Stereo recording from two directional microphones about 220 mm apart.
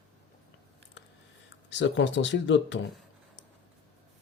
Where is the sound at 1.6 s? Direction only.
55° left (ahead or behind).